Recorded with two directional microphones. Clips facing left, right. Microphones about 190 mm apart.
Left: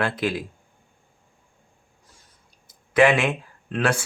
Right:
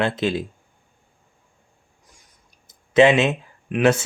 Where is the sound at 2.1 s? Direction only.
20° right (ahead or behind).